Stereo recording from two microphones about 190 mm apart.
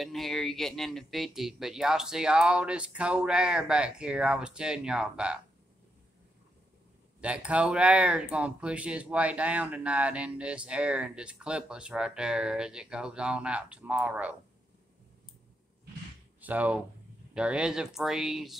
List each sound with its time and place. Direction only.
0.0 s speech: centre (ahead or behind)
7.2 s speech: 5° right (ahead or behind)
16.3 s speech: 10° right (ahead or behind)